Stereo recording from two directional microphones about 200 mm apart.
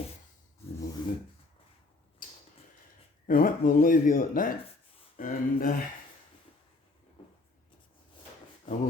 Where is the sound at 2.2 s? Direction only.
40° left (ahead or behind).